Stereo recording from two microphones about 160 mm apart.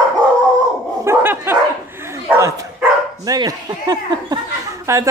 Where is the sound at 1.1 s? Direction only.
15° right (ahead or behind).